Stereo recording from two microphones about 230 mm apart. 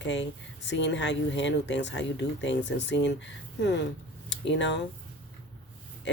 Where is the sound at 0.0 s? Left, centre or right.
Left.